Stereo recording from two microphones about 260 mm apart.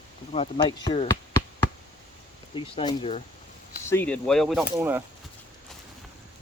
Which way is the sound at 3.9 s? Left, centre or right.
Centre.